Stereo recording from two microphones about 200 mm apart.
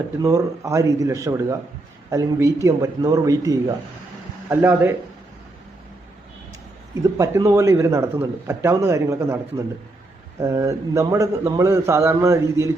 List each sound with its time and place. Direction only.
0.2 s a man's voice: 15° right (ahead or behind)
7.0 s a man's voice: 15° right (ahead or behind)
10.4 s a man's voice: 15° right (ahead or behind)